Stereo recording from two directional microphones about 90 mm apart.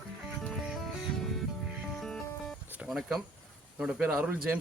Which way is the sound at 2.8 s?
5° right (ahead or behind).